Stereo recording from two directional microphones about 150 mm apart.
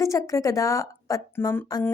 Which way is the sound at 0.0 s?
20° left (ahead or behind).